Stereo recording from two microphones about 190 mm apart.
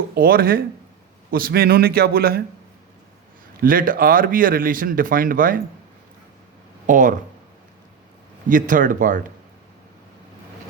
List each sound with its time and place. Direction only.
0.1 s speech: 50° right (ahead or behind)
3.6 s speech: 50° right (ahead or behind)
6.8 s speech: 45° right (ahead or behind)
8.4 s speech: 45° right (ahead or behind)